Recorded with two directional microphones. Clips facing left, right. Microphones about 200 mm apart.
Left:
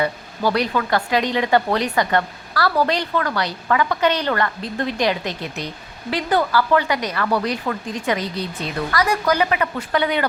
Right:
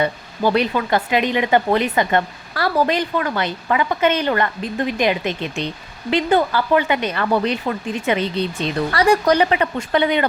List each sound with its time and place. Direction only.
0.0 s speech: 20° right (ahead or behind)